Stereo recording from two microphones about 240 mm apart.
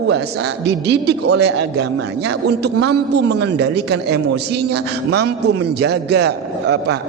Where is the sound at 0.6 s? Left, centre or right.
Right.